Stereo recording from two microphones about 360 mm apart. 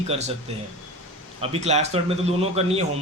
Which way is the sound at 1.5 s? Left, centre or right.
Centre.